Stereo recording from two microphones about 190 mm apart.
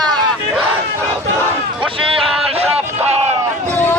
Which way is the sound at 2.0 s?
30° right (ahead or behind).